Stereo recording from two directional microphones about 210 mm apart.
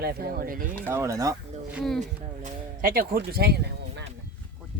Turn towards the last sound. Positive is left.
turn(degrees=-50)  # may be behind; listen again after turning